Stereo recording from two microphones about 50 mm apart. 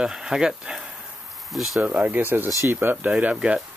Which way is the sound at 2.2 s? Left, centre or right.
Right.